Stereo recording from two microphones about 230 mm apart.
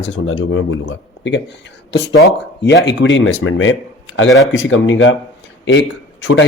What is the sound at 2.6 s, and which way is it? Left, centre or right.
Speech, left.